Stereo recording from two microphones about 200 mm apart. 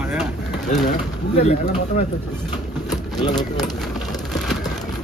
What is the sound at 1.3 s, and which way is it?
Speech, 40° left (ahead or behind).